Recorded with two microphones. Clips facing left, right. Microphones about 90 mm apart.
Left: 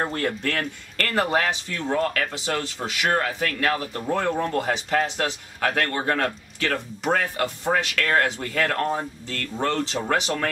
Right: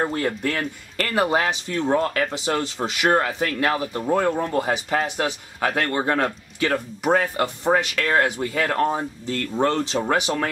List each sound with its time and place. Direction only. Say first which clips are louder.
0.0 s speech: right 2 dB; 10° right (ahead or behind)